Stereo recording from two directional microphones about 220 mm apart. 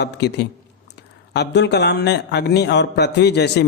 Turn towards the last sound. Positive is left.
turn(degrees=50)  # may be behind; listen again after turning